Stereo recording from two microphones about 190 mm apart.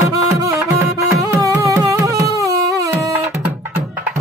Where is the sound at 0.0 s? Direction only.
15° right (ahead or behind).